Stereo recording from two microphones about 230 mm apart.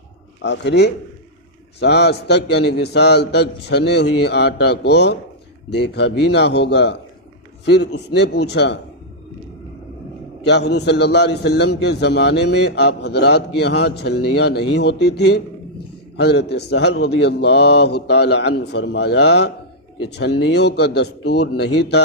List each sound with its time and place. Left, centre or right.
0.4 s a man's voice: left
10.4 s a man's voice: left